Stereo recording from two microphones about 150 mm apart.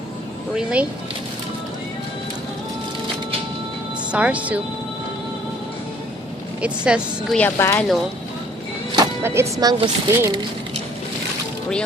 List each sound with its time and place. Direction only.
0.5 s a woman's voice: 10° right (ahead or behind)
4.1 s a woman's voice: 10° right (ahead or behind)
6.6 s a woman's voice: 5° right (ahead or behind)
7.3 s speech: 15° left (ahead or behind)
9.2 s speech: 20° right (ahead or behind)